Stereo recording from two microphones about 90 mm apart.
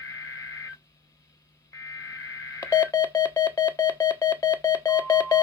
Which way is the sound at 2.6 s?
40° left (ahead or behind).